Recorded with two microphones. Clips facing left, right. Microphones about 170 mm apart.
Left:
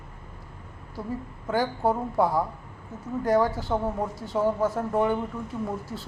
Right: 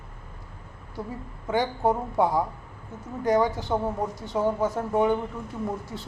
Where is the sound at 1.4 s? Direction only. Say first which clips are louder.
Right 1 dB; centre (ahead or behind).